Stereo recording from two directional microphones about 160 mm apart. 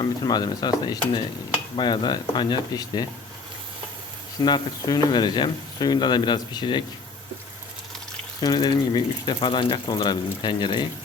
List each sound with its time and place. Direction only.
0.0 s speech: 25° left (ahead or behind)
4.4 s speech: 25° left (ahead or behind)
8.4 s speech: 25° left (ahead or behind)